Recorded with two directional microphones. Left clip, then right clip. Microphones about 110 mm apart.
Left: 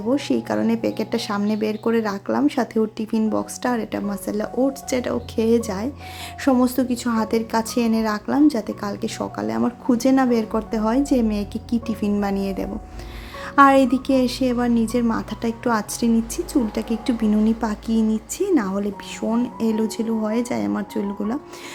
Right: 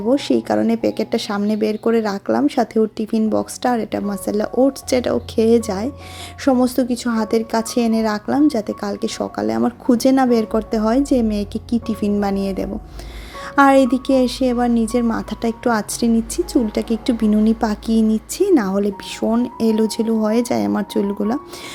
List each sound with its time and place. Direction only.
0.1 s a woman's voice: 35° right (ahead or behind); by 21.3 s 55° right (ahead or behind)